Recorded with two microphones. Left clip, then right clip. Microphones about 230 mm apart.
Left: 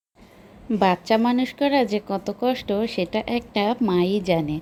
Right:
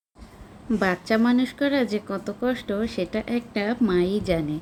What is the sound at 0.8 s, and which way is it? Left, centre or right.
A woman's voice, centre.